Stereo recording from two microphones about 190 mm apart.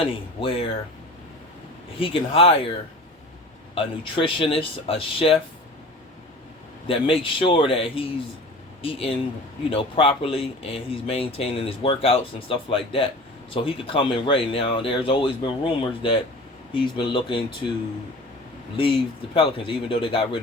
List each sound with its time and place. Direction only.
0.0 s speech: 30° left (ahead or behind)
2.0 s speech: 30° left (ahead or behind)
3.8 s speech: 25° left (ahead or behind)
6.8 s speech: 30° left (ahead or behind)
18.8 s speech: 25° left (ahead or behind)